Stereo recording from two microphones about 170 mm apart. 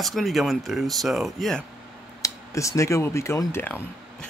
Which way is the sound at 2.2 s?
20° left (ahead or behind).